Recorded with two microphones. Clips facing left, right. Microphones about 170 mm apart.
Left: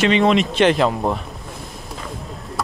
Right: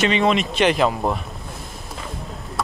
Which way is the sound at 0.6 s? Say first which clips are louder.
Left 2 dB; 10° right (ahead or behind).